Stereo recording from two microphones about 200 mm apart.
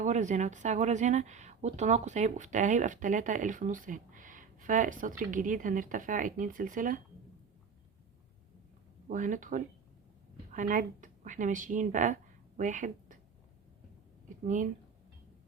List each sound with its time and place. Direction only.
0.0 s speech: 35° right (ahead or behind)
9.0 s speech: 40° right (ahead or behind)
14.4 s speech: 40° right (ahead or behind)